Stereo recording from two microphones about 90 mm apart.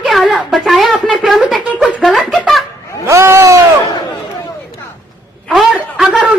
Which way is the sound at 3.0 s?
30° right (ahead or behind).